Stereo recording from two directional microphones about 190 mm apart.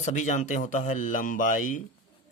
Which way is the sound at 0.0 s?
40° left (ahead or behind).